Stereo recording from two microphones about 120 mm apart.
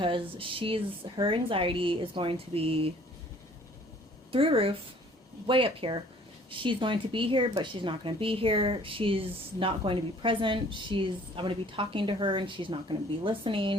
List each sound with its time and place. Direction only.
0.0 s speech: 45° right (ahead or behind)
4.3 s speech: 50° right (ahead or behind)